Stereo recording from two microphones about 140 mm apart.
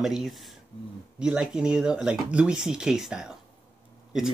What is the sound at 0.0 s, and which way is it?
Speech, centre (ahead or behind).